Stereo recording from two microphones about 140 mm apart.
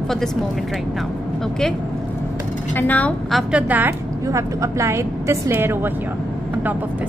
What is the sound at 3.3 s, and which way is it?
A woman's voice, 5° right (ahead or behind).